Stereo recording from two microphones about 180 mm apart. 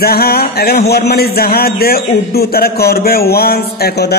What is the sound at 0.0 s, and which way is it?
A man's voice, 60° left (ahead or behind).